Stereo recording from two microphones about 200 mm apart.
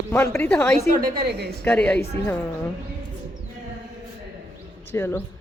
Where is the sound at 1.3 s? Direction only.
55° right (ahead or behind).